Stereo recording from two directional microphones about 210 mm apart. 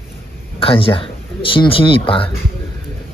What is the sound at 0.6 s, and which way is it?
Speech, 25° left (ahead or behind).